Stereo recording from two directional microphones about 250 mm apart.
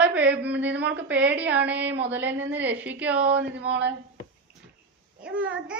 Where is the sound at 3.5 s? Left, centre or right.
Right.